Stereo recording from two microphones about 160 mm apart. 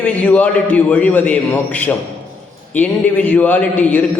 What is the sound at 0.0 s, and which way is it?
A man's voice, 10° left (ahead or behind).